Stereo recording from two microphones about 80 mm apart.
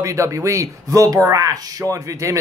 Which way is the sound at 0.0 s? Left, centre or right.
Right.